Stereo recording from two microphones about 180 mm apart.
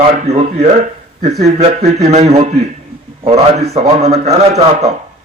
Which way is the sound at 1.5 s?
35° right (ahead or behind).